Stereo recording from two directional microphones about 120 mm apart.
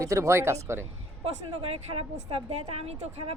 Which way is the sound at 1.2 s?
55° right (ahead or behind).